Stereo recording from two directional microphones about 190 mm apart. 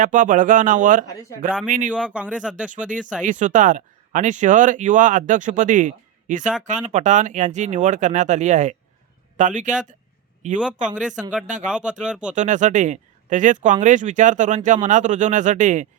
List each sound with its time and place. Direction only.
0.0 s speech: 45° right (ahead or behind)
1.9 s speech: 5° right (ahead or behind)
3.2 s speech: 40° right (ahead or behind)
11.7 s speech: 5° right (ahead or behind)
12.3 s speech: 40° right (ahead or behind)